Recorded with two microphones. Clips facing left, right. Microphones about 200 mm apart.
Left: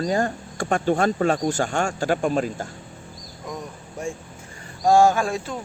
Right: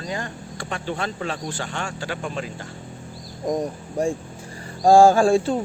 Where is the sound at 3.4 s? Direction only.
35° right (ahead or behind).